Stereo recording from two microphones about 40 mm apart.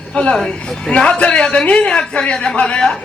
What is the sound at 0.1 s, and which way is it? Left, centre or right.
A man's voice, left.